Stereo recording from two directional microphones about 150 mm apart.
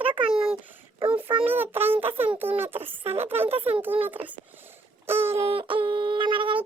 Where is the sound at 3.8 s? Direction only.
15° right (ahead or behind).